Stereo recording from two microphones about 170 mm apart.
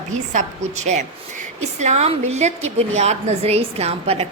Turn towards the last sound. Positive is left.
turn(degrees=-35)  # may be behind; listen again after turning